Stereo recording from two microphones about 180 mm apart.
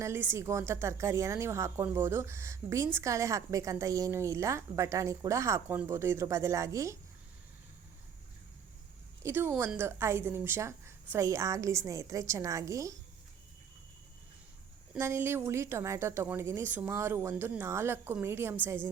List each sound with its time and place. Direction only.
0.0 s a woman's voice: 15° right (ahead or behind)
9.2 s a woman's voice: 15° right (ahead or behind)
14.9 s a woman's voice: 15° right (ahead or behind)